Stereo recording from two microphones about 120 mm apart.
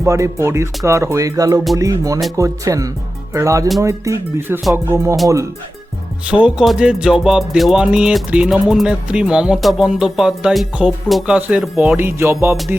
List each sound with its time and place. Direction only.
0.0 s speech: 25° right (ahead or behind)
6.3 s speech: 5° right (ahead or behind)
11.9 s speech: 20° right (ahead or behind)